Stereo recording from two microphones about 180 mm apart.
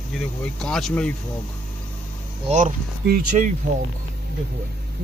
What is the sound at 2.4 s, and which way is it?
Speech, 40° right (ahead or behind).